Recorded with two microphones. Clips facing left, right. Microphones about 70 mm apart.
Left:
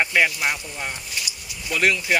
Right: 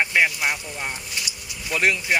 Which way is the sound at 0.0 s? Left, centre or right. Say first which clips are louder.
Even; centre.